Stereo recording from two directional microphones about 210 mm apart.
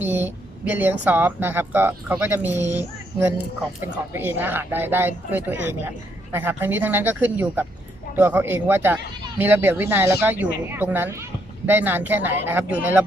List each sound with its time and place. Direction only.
0.0 s a woman's voice: 10° right (ahead or behind)